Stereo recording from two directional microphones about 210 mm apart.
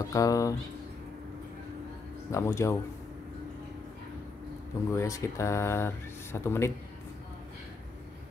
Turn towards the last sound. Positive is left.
turn(degrees=10)  # may be behind; listen again after turning